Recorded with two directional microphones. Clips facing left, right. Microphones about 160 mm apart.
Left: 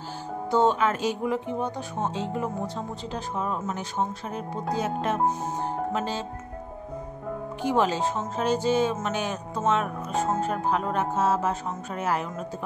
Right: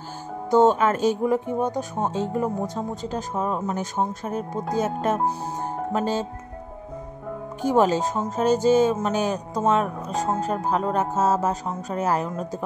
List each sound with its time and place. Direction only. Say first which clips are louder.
0.5 s speech: right 5 dB; 45° right (ahead or behind)
7.6 s speech: right 4 dB; 45° right (ahead or behind)